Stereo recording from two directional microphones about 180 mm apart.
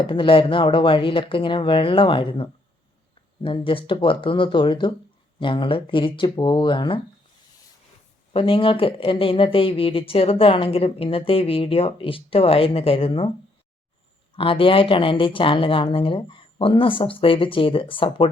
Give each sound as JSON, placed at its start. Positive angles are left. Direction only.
{"t": 0.0, "sound": "speech", "side_deg": 30}
{"t": 8.3, "sound": "speech", "side_deg": 30}
{"t": 14.3, "sound": "speech", "side_deg": 30}